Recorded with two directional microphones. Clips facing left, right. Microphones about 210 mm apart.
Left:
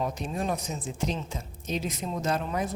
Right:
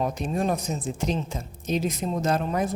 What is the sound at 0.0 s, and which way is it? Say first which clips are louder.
Speech: right 4 dB; 50° right (ahead or behind).